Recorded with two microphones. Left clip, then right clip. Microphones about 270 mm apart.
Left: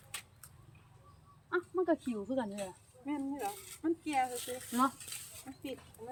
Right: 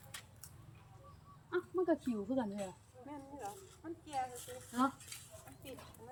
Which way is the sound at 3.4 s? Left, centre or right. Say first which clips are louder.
Left 9 dB; left.